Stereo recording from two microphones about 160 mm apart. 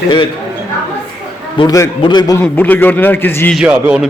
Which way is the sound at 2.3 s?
10° left (ahead or behind).